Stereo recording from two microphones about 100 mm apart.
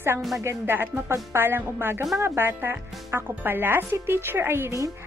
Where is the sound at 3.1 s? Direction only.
20° right (ahead or behind).